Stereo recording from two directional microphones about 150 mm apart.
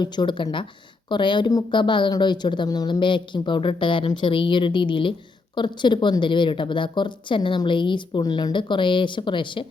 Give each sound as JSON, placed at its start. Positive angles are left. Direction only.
{"t": 0.0, "sound": "a woman's voice", "side_deg": 30}